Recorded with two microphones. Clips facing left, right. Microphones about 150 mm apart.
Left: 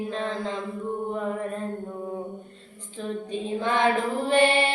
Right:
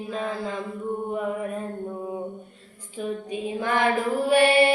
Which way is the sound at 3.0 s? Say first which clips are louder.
Right 1 dB; 10° right (ahead or behind).